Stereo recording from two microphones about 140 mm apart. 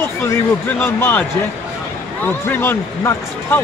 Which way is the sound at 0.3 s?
15° left (ahead or behind).